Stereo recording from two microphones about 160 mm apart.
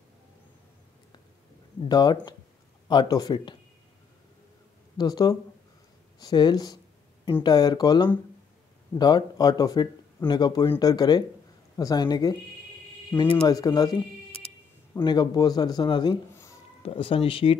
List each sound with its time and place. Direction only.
1.9 s speech: 25° left (ahead or behind)
4.9 s speech: 25° left (ahead or behind)
15.0 s speech: 25° left (ahead or behind)